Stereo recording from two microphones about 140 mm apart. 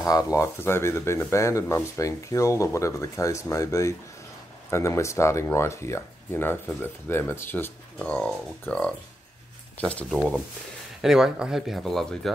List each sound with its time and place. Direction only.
0.0 s speech: 25° left (ahead or behind)
10.1 s speech: 5° right (ahead or behind)